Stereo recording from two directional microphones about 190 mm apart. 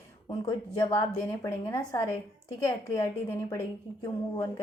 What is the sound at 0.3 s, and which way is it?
Speech, 25° left (ahead or behind).